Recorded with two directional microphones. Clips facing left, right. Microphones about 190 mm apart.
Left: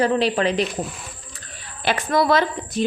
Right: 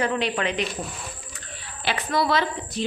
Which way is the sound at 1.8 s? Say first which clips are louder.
Left 4 dB; 45° left (ahead or behind).